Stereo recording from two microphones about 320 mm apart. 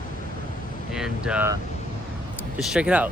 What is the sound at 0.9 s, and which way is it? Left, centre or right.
Speech, centre.